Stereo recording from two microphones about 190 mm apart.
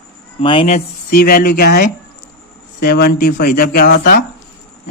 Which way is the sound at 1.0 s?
50° left (ahead or behind).